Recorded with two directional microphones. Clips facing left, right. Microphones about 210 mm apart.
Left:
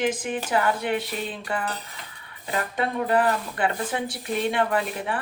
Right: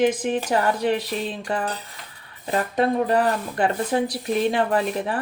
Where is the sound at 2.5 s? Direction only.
35° right (ahead or behind).